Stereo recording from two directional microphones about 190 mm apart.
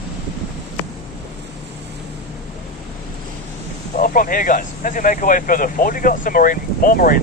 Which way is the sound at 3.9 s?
45° left (ahead or behind).